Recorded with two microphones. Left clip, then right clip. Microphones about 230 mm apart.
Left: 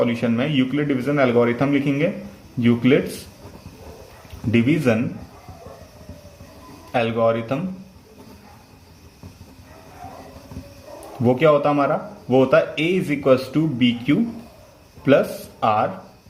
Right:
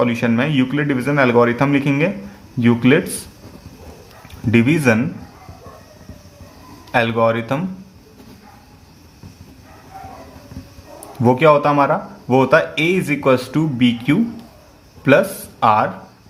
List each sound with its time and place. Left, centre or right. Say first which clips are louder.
0.0 s a man's voice: right 3 dB; right
4.5 s a man's voice: right 4 dB; right
6.9 s a man's voice: right 3 dB; right
11.3 s a man's voice: right 4 dB; right
15.6 s a man's voice: right 5 dB; right